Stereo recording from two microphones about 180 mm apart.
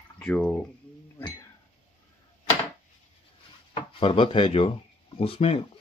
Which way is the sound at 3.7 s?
30° left (ahead or behind).